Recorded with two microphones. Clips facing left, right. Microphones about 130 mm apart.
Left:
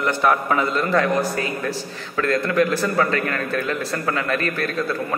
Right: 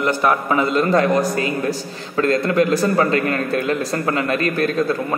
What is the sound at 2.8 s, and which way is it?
A man's voice, 30° right (ahead or behind).